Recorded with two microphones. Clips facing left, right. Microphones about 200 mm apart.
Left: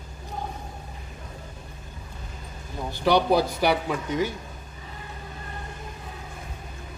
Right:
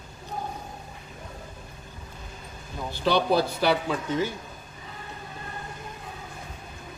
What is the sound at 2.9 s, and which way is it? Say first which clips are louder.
A man's voice: left 2 dB; 15° left (ahead or behind).